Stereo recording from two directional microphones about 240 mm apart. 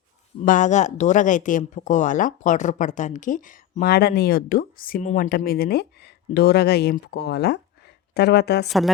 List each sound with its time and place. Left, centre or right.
0.4 s a woman's voice: left
8.6 s a woman's voice: centre